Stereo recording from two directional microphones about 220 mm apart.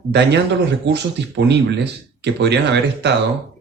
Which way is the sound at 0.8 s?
50° right (ahead or behind).